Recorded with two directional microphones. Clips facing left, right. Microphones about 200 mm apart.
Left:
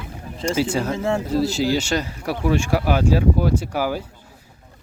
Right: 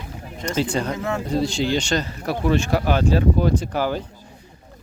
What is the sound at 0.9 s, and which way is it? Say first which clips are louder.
Speech: left 4 dB; 30° left (ahead or behind).